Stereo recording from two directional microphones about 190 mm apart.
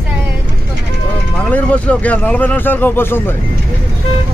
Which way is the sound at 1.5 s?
5° left (ahead or behind).